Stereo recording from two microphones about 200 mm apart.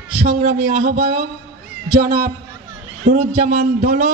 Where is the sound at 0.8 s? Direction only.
45° right (ahead or behind).